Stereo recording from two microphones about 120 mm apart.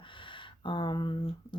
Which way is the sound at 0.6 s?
40° left (ahead or behind).